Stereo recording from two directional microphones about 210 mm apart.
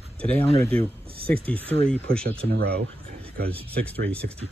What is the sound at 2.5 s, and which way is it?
Speech, 50° right (ahead or behind).